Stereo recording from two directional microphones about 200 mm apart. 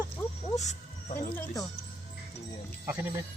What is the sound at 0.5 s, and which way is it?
Speech, 35° left (ahead or behind).